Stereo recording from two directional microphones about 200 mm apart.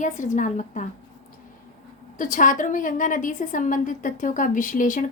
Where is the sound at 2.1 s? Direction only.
40° left (ahead or behind).